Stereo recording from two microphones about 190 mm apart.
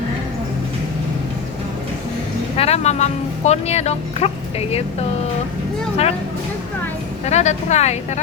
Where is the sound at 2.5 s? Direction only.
30° left (ahead or behind).